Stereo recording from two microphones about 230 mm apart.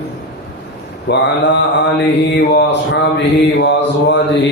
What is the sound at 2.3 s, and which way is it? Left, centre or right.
Mantra, left.